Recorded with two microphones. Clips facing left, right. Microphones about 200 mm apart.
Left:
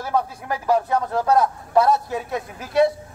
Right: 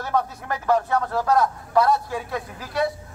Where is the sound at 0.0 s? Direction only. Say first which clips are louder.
Left 1 dB; 10° left (ahead or behind).